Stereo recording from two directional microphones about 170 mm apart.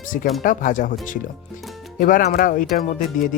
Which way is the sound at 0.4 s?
50° left (ahead or behind).